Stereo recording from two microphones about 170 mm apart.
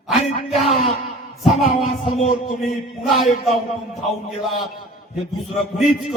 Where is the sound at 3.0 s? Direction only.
Centre (ahead or behind).